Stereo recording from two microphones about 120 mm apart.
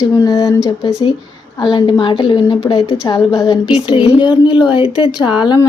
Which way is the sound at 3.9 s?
40° left (ahead or behind).